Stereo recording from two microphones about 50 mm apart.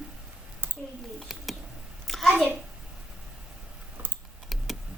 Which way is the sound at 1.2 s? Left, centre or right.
Centre.